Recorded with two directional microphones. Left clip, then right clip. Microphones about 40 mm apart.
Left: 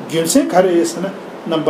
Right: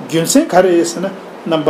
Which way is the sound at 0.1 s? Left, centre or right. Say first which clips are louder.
Right 2 dB; centre.